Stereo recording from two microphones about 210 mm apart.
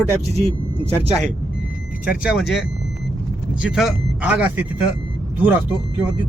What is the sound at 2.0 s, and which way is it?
Speech, 5° right (ahead or behind).